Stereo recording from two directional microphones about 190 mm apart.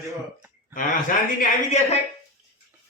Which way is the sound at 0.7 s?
45° left (ahead or behind).